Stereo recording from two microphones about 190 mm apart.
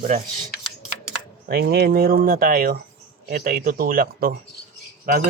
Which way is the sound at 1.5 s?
55° right (ahead or behind).